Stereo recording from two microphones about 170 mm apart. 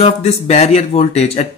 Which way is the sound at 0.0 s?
40° left (ahead or behind).